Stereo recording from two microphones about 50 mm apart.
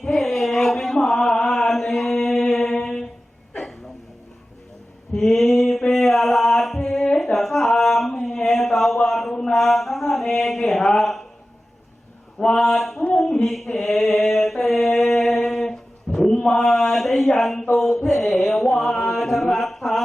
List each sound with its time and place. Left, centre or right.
0.0 s chant: centre
5.1 s mantra: centre
5.8 s music: centre
7.3 s a sound: centre
7.8 s mantra: centre
10.9 s a sound: centre
12.4 s mantra: centre
12.6 s mantra: centre
15.0 s a sound: centre
18.1 s music: centre
18.8 s chant: centre